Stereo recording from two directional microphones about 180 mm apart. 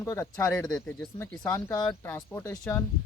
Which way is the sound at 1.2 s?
20° left (ahead or behind).